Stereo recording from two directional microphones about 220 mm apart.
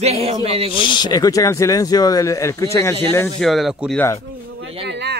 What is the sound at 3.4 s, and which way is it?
Speech, centre (ahead or behind).